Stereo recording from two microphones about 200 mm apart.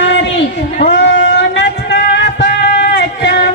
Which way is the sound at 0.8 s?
60° left (ahead or behind).